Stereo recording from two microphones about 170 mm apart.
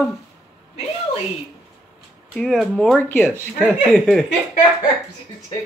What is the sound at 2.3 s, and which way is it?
Speech, centre (ahead or behind).